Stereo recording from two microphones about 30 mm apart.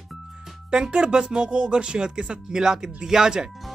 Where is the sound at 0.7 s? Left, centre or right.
Right.